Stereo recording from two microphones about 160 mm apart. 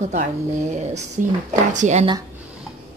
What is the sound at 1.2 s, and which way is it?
Speech, 50° right (ahead or behind).